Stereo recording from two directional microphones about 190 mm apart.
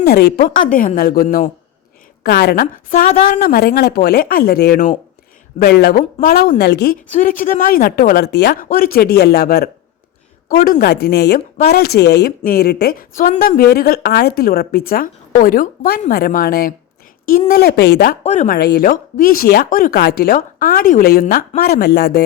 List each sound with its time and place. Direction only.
0.0 s speech: 55° left (ahead or behind)
0.7 s speech: 45° left (ahead or behind)
6.0 s speech: 45° left (ahead or behind)
11.3 s speech: 40° left (ahead or behind)
11.7 s speech: 55° left (ahead or behind)
18.2 s speech: 45° left (ahead or behind)